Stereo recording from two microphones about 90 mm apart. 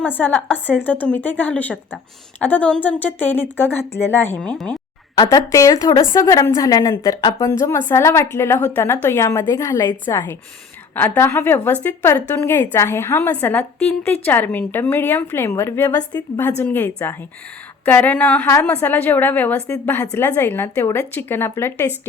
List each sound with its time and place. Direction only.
0.0 s a woman's voice: 20° left (ahead or behind)
4.4 s a woman's voice: 10° left (ahead or behind)
5.3 s a woman's voice: 40° left (ahead or behind)
7.5 s a woman's voice: 30° left (ahead or behind)
13.3 s a woman's voice: 15° left (ahead or behind)